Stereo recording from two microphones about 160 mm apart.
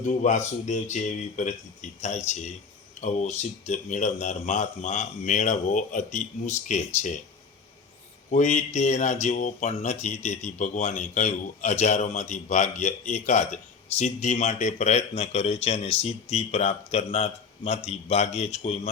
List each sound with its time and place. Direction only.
0.2 s speech: 50° left (ahead or behind)
8.3 s speech: 45° left (ahead or behind)